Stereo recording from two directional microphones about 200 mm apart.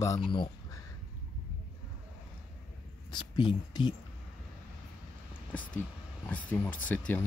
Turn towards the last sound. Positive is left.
turn(degrees=10)  # may be behind; listen again after turning